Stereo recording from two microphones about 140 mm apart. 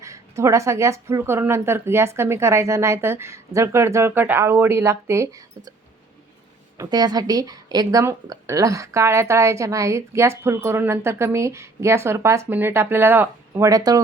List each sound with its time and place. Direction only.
0.0 s speech: 20° right (ahead or behind)
6.7 s speech: 30° right (ahead or behind)